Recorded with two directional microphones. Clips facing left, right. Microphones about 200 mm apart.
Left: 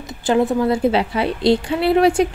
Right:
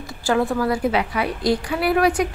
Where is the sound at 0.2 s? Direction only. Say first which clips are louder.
Left 3 dB; 20° left (ahead or behind).